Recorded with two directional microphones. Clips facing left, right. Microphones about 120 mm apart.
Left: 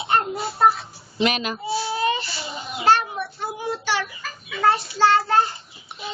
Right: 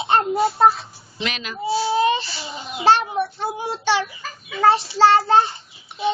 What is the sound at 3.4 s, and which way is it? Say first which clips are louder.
Child singing: right 4 dB; 25° right (ahead or behind).